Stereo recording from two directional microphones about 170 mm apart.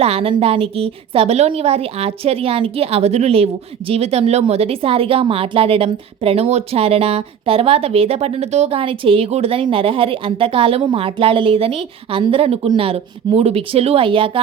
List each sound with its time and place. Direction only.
0.0 s a woman's voice: 35° right (ahead or behind)